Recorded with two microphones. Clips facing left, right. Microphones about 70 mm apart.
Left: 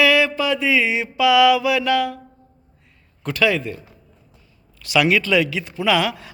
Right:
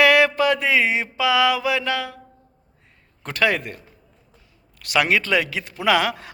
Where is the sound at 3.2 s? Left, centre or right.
Right.